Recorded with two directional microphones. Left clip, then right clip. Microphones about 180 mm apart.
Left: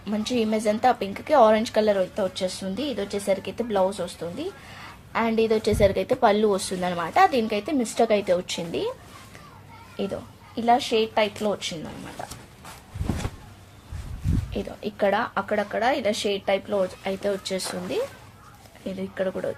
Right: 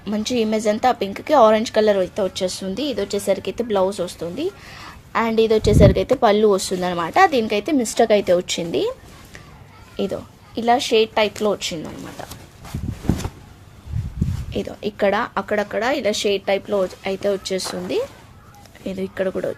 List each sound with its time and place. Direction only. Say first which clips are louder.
0.0 s a woman's voice: right 4 dB; 35° right (ahead or behind)
10.0 s speech: right 5 dB; 45° right (ahead or behind)
14.5 s a woman's voice: right 7 dB; 35° right (ahead or behind)